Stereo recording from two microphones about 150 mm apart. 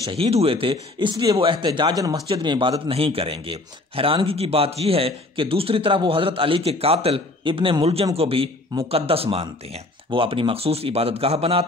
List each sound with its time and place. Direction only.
0.1 s a man's voice: 40° right (ahead or behind)